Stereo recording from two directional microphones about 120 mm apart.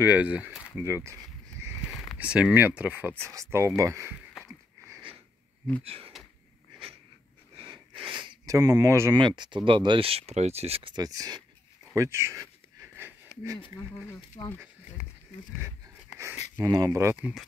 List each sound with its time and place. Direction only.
0.0 s speech: 10° right (ahead or behind)
2.1 s speech: 10° right (ahead or behind)
3.3 s speech: 25° right (ahead or behind)
5.9 s speech: 55° right (ahead or behind)
8.0 s a sound: 40° right (ahead or behind)
8.5 s speech: 30° right (ahead or behind)
9.1 s speech: 40° right (ahead or behind)
11.0 s speech: 30° right (ahead or behind)
14.4 s speech: 35° left (ahead or behind)
16.5 s speech: 30° right (ahead or behind)
17.2 s speech: centre (ahead or behind)